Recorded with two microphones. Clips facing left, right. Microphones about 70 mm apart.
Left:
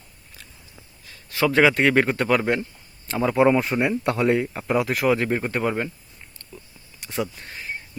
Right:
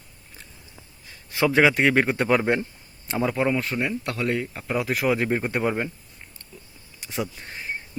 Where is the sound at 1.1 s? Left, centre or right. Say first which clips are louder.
Even; right.